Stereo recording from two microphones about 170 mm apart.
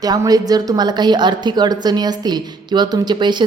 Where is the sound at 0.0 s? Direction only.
20° right (ahead or behind).